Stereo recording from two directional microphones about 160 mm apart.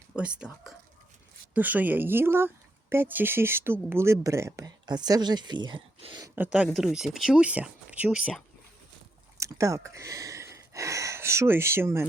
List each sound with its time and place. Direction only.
0.2 s a woman's voice: 5° right (ahead or behind); by 6.2 s 30° right (ahead or behind)
6.2 s a woman's voice: 10° right (ahead or behind)
9.4 s speech: 20° right (ahead or behind)